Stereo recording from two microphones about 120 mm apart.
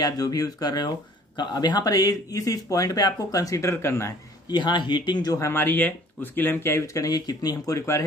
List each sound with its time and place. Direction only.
0.0 s speech: 30° left (ahead or behind)
4.5 s speech: 40° left (ahead or behind)